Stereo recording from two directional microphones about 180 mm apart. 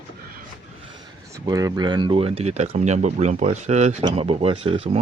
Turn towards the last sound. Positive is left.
turn(degrees=-35)  # may be behind; listen again after turning